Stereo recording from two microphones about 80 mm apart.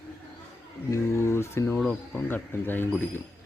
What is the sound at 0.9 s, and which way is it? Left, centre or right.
Speech, left.